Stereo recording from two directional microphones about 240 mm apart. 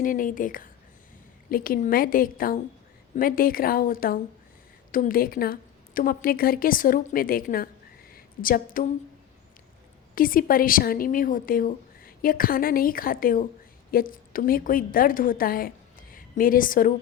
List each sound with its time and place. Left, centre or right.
0.0 s a woman's voice: left
10.2 s a woman's voice: left